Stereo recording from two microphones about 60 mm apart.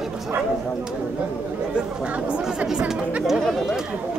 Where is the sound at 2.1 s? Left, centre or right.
Centre.